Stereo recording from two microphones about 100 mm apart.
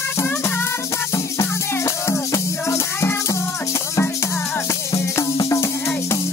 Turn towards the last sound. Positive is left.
turn(degrees=30)  # may be behind; listen again after turning